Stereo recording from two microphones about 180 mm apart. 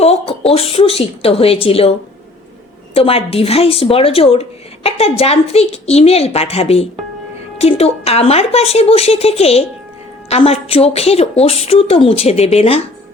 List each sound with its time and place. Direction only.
0.0 s a woman's voice: 35° left (ahead or behind)